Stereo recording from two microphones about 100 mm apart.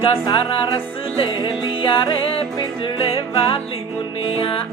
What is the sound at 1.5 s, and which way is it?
Music, 60° left (ahead or behind).